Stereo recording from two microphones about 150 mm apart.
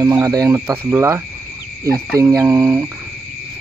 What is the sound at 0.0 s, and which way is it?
Speech, 15° right (ahead or behind).